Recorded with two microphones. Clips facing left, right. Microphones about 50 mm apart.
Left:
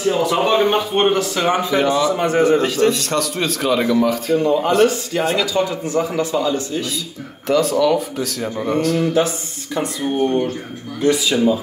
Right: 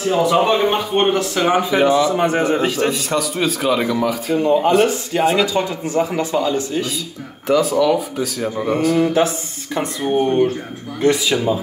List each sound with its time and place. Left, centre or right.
0.0 s a man's voice: centre
4.4 s a man's voice: centre
5.4 s a man's voice: right